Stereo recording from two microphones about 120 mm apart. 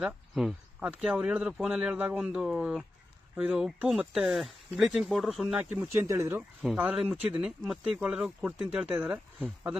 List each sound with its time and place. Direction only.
0.0 s speech: 5° right (ahead or behind)
5.7 s speech: 20° right (ahead or behind)
6.6 s speech: 5° right (ahead or behind)